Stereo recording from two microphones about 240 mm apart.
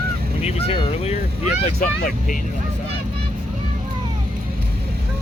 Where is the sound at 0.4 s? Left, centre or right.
Left.